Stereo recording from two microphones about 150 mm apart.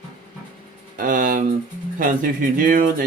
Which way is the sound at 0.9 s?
65° right (ahead or behind).